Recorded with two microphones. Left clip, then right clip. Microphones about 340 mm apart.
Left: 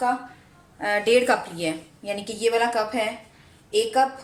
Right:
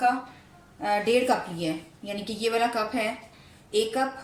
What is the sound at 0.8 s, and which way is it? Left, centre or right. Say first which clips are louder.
A woman's voice: left 4 dB; left.